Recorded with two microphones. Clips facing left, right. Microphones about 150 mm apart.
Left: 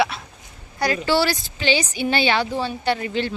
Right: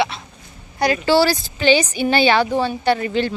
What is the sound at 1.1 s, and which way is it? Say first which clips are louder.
Speech: right 6 dB; 35° right (ahead or behind).